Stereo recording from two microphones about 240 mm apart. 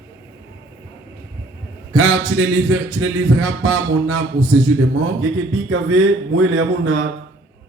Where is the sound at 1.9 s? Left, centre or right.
Right.